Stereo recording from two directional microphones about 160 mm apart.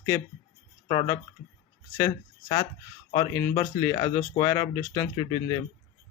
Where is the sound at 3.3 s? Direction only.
20° left (ahead or behind).